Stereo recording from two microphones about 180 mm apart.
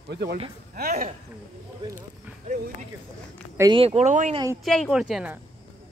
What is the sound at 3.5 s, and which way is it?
Speech, 20° right (ahead or behind).